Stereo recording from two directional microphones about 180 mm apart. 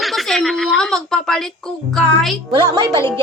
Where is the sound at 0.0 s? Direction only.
Centre (ahead or behind).